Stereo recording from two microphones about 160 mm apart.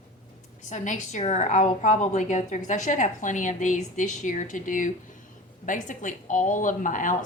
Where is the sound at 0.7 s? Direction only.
50° left (ahead or behind).